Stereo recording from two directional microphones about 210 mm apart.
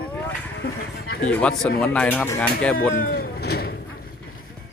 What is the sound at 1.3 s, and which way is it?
Speech, 5° left (ahead or behind).